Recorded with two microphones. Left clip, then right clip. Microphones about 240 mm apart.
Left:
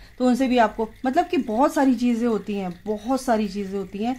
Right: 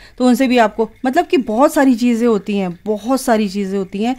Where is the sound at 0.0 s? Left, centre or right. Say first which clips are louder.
Right 7 dB; right.